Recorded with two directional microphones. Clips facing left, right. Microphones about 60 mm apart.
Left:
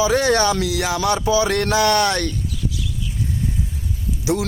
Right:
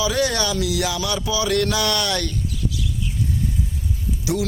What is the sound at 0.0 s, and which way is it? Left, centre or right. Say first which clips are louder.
Music: left 5 dB; left.